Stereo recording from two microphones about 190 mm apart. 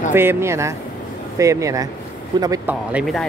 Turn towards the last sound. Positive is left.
turn(degrees=0)  # may be behind; listen again after turning